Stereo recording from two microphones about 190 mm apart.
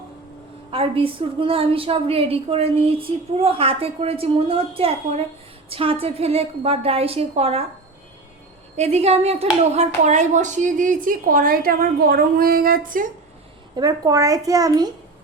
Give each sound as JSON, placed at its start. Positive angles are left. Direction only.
{"t": 0.7, "sound": "a woman's voice", "side_deg": -30}
{"t": 8.7, "sound": "a woman's voice", "side_deg": -35}
{"t": 13.7, "sound": "speech", "side_deg": -20}